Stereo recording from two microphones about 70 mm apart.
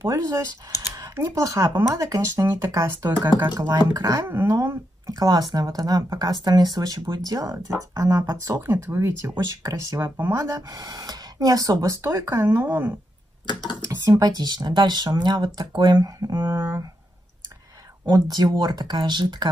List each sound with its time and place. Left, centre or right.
0.0 s speech: right
3.2 s speech: right
4.3 s speech: right
5.3 s speech: right
8.5 s speech: right
9.6 s speech: right
10.1 s speech: right
10.5 s speech: right
12.0 s speech: right
14.1 s speech: right
16.4 s speech: right
18.0 s speech: right